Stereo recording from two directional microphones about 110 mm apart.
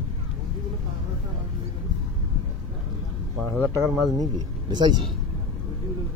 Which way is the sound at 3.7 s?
35° right (ahead or behind).